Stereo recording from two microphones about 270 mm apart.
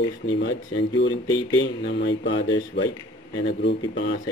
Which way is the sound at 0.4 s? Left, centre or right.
Left.